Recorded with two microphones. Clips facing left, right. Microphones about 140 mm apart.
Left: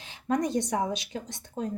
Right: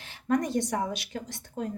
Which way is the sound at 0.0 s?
20° left (ahead or behind).